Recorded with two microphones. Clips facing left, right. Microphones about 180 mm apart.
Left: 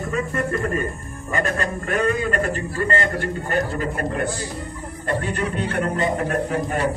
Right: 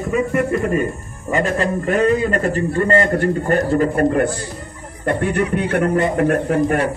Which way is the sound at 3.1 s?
45° right (ahead or behind).